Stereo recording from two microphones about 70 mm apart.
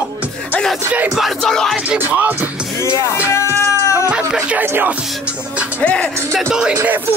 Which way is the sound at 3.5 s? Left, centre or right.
Left.